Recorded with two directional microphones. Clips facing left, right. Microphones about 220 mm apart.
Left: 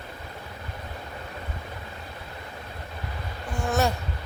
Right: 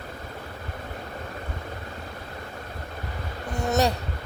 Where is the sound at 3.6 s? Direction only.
20° right (ahead or behind).